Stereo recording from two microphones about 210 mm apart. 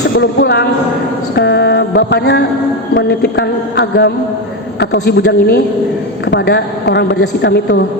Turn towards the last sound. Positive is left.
turn(degrees=50)  # may be behind; listen again after turning